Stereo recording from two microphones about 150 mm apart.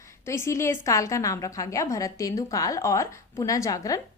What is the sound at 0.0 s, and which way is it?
A woman's voice, 20° left (ahead or behind).